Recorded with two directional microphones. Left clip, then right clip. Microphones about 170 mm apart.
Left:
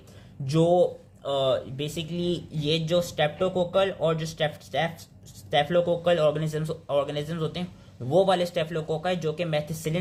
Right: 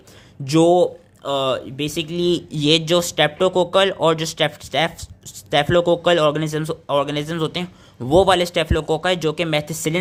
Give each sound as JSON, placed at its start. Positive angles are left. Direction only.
{"t": 0.4, "sound": "speech", "side_deg": -40}